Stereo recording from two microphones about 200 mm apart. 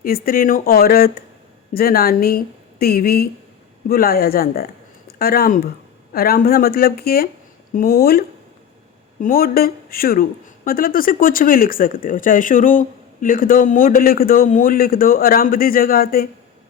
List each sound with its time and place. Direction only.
0.0 s speech: 45° left (ahead or behind)
9.2 s speech: 45° left (ahead or behind)